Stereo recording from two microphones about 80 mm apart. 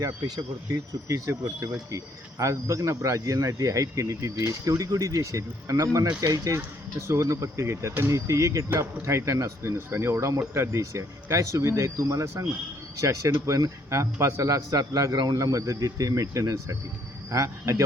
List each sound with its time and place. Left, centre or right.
0.0 s speech: right
1.0 s speech: right